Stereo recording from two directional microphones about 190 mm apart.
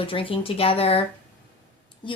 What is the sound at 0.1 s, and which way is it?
Speech, 30° left (ahead or behind).